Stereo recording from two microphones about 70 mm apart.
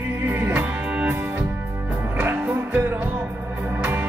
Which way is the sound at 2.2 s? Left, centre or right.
Right.